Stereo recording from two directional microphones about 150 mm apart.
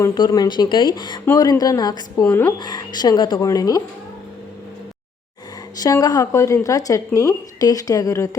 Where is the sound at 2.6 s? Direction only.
30° left (ahead or behind).